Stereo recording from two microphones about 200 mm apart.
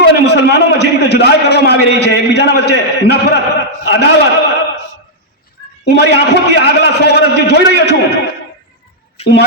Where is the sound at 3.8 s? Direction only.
60° left (ahead or behind).